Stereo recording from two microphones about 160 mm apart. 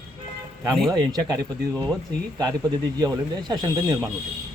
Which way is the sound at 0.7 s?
Centre (ahead or behind).